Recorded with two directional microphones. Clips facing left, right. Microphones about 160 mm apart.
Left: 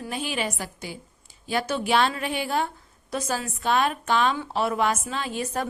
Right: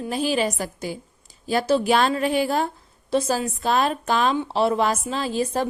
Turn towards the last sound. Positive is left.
turn(degrees=-30)  # may be behind; listen again after turning